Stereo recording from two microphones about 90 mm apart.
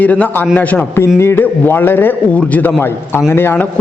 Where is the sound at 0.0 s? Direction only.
15° left (ahead or behind).